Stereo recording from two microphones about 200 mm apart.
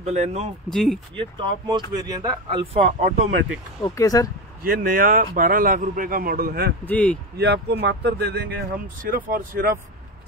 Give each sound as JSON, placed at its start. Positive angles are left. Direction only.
{"t": 0.0, "sound": "speech", "side_deg": -35}
{"t": 0.7, "sound": "speech", "side_deg": 0}
{"t": 1.1, "sound": "speech", "side_deg": -25}
{"t": 3.8, "sound": "speech", "side_deg": 15}
{"t": 4.6, "sound": "a man's voice", "side_deg": -45}
{"t": 6.9, "sound": "speech", "side_deg": 5}
{"t": 7.3, "sound": "a man's voice", "side_deg": -55}